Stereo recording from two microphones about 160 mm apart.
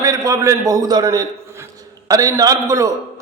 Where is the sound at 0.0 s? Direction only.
20° right (ahead or behind).